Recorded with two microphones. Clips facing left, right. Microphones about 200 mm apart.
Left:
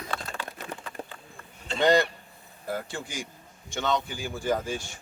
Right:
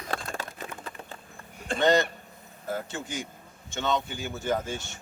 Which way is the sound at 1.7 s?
50° right (ahead or behind).